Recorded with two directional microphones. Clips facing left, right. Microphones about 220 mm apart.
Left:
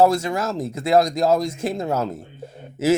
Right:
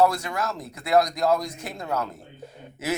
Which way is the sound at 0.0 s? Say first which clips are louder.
Left 4 dB; 25° left (ahead or behind).